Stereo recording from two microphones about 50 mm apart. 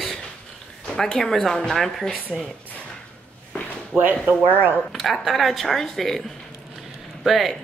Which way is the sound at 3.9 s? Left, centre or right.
Right.